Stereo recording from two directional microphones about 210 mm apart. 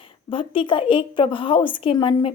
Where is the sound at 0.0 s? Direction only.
25° left (ahead or behind).